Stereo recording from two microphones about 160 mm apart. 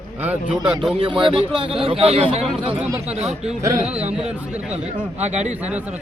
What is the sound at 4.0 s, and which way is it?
A man's voice, 40° right (ahead or behind).